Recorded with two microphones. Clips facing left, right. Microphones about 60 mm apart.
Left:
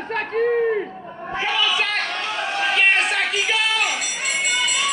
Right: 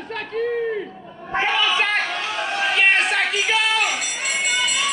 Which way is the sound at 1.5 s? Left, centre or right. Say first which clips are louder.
Right 1 dB; right.